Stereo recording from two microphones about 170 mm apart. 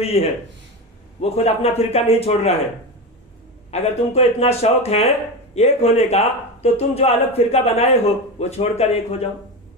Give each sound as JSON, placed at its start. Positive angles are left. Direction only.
{"t": 0.0, "sound": "speech", "side_deg": 35}
{"t": 1.3, "sound": "speech", "side_deg": 35}
{"t": 3.7, "sound": "speech", "side_deg": 40}